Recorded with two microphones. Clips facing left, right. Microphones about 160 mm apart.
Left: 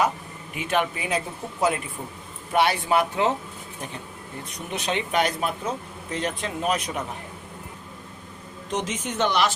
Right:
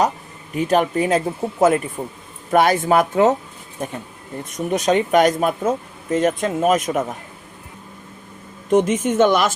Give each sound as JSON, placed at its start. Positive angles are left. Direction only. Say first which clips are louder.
{"t": 0.5, "sound": "speech", "louder": "right 8 dB", "side_deg": -40}
{"t": 4.5, "sound": "speech", "louder": "right 10 dB", "side_deg": -40}
{"t": 8.7, "sound": "speech", "louder": "right 12 dB", "side_deg": -50}